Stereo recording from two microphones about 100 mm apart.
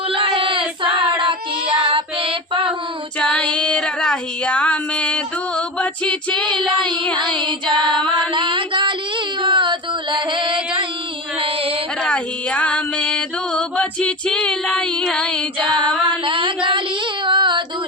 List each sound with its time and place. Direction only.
0.3 s female singing: 60° right (ahead or behind)
0.9 s child singing: 55° right (ahead or behind)
3.5 s child singing: 10° left (ahead or behind)
6.4 s female singing: 50° right (ahead or behind)
7.9 s a sound: 55° right (ahead or behind)
11.3 s music: 70° right (ahead or behind)
12.0 s music: 10° left (ahead or behind)
15.0 s child singing: 5° left (ahead or behind)
16.0 s a sound: 55° right (ahead or behind)
17.2 s female singing: 50° right (ahead or behind)